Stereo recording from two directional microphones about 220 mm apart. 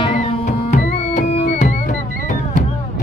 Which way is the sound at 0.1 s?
25° left (ahead or behind).